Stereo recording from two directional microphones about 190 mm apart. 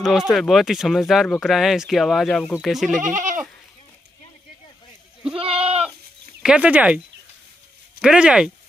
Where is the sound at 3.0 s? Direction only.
40° right (ahead or behind).